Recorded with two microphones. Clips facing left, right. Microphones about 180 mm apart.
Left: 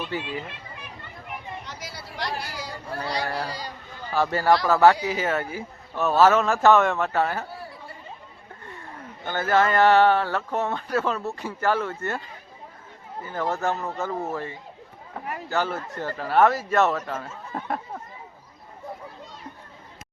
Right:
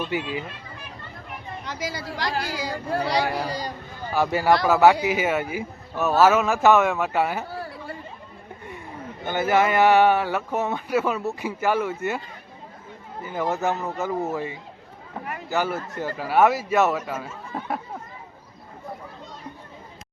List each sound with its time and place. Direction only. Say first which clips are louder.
0.1 s speech: right 3 dB; 10° right (ahead or behind)
1.6 s speech: right 8 dB; 90° right
3.2 s speech: right 3 dB; 15° right (ahead or behind)
7.5 s chatter: right 5 dB; 90° right
9.2 s speech: right 1 dB; 15° right (ahead or behind)
13.2 s speech: right 2 dB; 10° right (ahead or behind)